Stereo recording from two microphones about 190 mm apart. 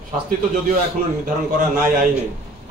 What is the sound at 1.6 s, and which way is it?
Speech, 45° right (ahead or behind).